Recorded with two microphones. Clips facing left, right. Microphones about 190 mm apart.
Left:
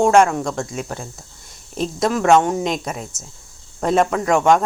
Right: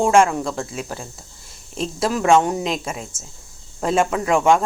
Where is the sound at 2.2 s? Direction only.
10° right (ahead or behind).